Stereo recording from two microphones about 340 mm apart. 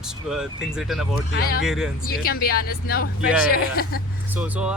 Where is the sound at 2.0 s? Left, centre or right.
Left.